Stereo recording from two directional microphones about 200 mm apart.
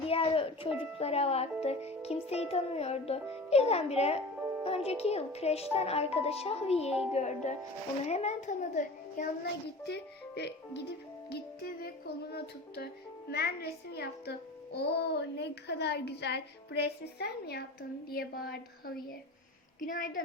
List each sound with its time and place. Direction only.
0.1 s music: 25° left (ahead or behind)
0.9 s speech: 30° left (ahead or behind)
9.8 s a child's voice: 55° left (ahead or behind)
11.3 s music: 50° left (ahead or behind)
14.8 s a child's voice: 55° left (ahead or behind)
18.1 s music: 50° left (ahead or behind)